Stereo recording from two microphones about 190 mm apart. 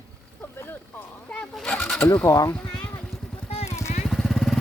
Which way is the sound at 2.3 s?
20° left (ahead or behind).